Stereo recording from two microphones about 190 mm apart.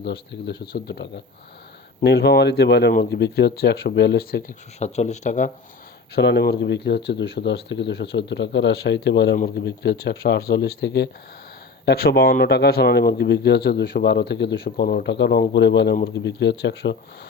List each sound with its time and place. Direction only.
0.0 s speech: 65° left (ahead or behind)
4.8 s speech: 35° left (ahead or behind)
6.1 s speech: 60° left (ahead or behind)